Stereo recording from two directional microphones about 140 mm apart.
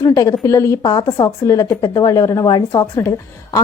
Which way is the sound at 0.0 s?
25° left (ahead or behind).